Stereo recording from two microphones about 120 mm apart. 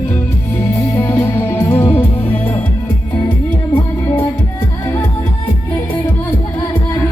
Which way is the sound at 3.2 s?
45° left (ahead or behind).